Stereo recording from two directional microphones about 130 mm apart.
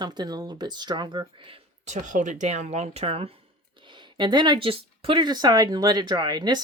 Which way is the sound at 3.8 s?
35° right (ahead or behind).